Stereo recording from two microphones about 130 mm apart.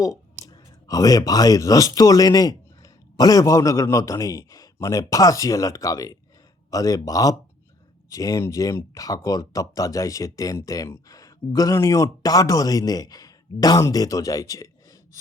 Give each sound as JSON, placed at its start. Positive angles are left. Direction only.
{"t": 0.4, "sound": "speech", "side_deg": 25}